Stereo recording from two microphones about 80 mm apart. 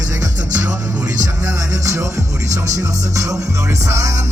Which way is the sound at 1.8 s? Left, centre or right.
Right.